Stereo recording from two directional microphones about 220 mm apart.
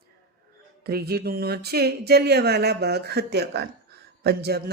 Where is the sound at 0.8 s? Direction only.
45° right (ahead or behind).